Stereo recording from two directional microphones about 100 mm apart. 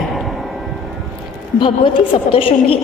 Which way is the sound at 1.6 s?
55° left (ahead or behind).